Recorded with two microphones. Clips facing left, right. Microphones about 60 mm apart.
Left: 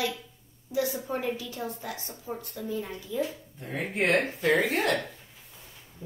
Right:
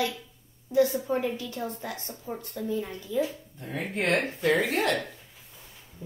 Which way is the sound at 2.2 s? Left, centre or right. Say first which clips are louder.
Right 2 dB; centre.